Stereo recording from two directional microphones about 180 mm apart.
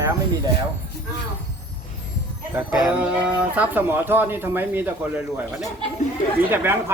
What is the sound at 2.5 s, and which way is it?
Speech, 10° right (ahead or behind).